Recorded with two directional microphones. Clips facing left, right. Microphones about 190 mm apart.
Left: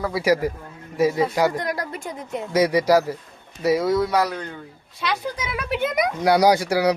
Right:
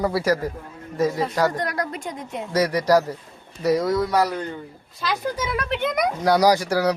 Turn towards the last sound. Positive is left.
turn(degrees=10)  # may be behind; listen again after turning